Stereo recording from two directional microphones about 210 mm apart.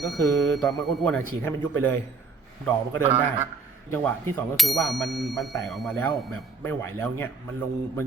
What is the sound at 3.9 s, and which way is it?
Speech, 10° left (ahead or behind).